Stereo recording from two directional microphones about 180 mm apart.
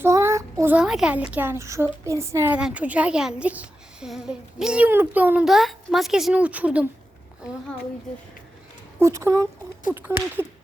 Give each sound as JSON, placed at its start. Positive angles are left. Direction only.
{"t": 0.0, "sound": "a child's voice", "side_deg": -15}
{"t": 9.0, "sound": "speech", "side_deg": -15}